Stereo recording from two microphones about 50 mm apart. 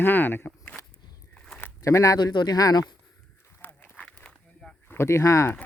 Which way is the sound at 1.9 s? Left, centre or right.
Left.